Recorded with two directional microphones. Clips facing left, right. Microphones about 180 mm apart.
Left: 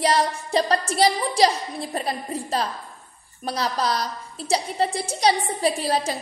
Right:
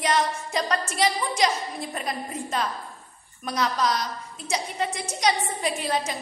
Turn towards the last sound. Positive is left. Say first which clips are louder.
# left 4 dB
turn(degrees=35)  # may be behind; listen again after turning